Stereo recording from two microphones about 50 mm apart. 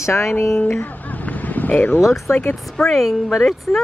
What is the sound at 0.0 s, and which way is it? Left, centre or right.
Speech, left.